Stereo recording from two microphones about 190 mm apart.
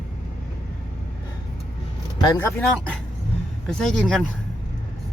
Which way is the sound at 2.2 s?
20° left (ahead or behind).